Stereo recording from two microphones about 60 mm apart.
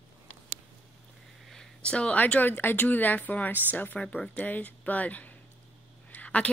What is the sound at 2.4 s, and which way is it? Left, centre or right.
Speech, left.